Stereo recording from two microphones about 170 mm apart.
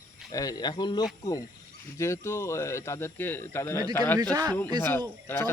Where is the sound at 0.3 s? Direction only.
20° left (ahead or behind).